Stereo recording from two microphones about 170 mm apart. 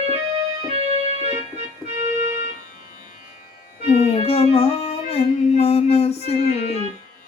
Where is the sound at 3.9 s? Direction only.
40° left (ahead or behind).